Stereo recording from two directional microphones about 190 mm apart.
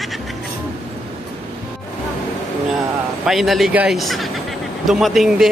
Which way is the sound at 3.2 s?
Centre (ahead or behind).